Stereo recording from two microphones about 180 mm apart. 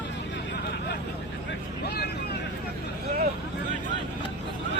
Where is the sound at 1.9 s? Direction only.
60° left (ahead or behind).